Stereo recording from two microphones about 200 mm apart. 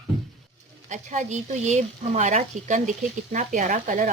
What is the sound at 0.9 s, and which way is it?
Speech, 35° right (ahead or behind).